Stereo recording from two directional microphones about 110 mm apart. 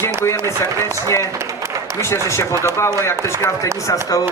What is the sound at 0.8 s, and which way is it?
A man's voice, 25° left (ahead or behind).